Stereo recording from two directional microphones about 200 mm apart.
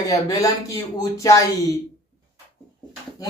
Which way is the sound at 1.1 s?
15° left (ahead or behind).